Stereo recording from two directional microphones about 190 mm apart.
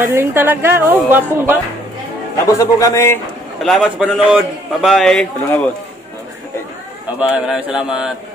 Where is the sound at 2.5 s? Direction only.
15° left (ahead or behind).